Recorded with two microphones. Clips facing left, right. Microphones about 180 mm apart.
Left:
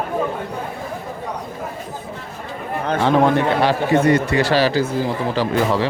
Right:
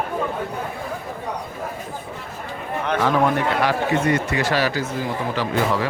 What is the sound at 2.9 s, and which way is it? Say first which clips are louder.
A man's voice: left 4 dB; 30° left (ahead or behind).